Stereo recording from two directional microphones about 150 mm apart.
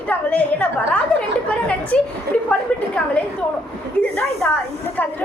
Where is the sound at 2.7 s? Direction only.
10° left (ahead or behind).